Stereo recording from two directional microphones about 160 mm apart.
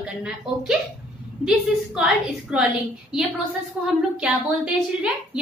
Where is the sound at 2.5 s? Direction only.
5° right (ahead or behind).